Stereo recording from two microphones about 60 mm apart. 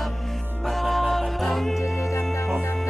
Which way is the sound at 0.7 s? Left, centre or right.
Centre.